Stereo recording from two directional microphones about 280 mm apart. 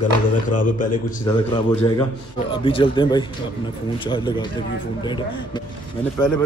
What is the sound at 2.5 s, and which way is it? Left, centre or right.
Speech, centre.